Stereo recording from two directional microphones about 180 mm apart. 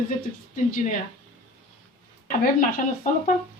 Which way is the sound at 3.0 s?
50° left (ahead or behind).